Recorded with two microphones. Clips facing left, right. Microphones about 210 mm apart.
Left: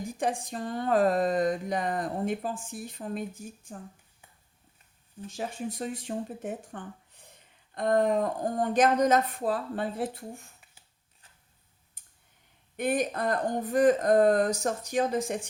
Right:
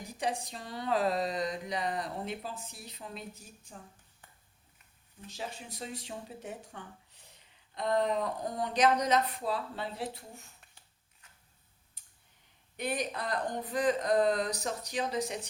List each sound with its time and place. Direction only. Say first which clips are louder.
0.2 s speech: left 4 dB; 50° left (ahead or behind)
5.3 s speech: left 8 dB; 50° left (ahead or behind)
12.0 s clicking: left 2 dB; 50° left (ahead or behind)
12.7 s speech: left 7 dB; 50° left (ahead or behind)